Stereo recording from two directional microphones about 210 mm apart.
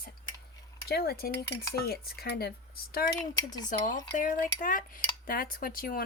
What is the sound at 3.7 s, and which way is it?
Cutlery, 40° left (ahead or behind).